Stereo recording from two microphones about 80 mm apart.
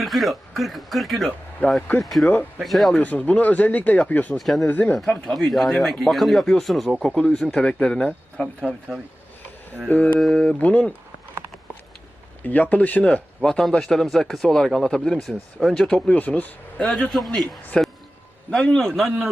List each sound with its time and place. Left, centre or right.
0.0 s speech: centre
1.6 s speech: left
2.0 s speech: centre
2.2 s speech: left
2.6 s speech: centre
3.0 s speech: centre
4.4 s speech: centre
4.6 s speech: left
4.9 s speech: centre
9.9 s speech: centre
10.2 s speech: centre
12.4 s speech: left; by 16.0 s centre
16.0 s speech: left
17.1 s speech: centre